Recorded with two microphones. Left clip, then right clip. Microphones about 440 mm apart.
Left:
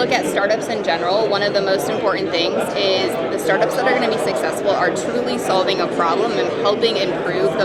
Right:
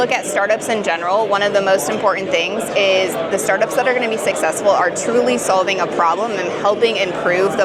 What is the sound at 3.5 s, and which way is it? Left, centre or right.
Speech, right.